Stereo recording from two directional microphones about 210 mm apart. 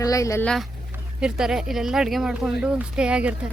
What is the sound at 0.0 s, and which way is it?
Speech, 15° left (ahead or behind).